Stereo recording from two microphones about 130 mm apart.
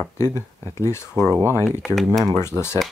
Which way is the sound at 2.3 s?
20° left (ahead or behind).